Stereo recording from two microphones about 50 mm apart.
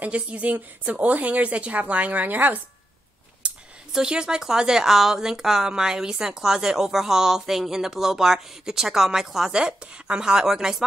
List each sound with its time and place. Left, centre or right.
0.0 s a woman's voice: right
3.4 s a sound: right
3.9 s speech: centre
9.5 s speech: centre